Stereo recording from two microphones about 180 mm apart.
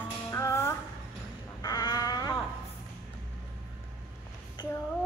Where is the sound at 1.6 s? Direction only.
25° left (ahead or behind).